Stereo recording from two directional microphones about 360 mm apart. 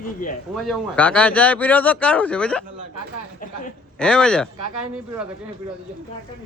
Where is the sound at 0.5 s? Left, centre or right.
Centre.